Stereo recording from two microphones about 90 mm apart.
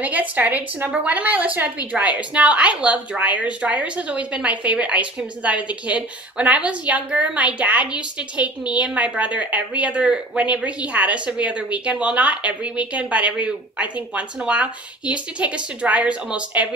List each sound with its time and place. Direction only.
0.0 s a woman's voice: 15° right (ahead or behind)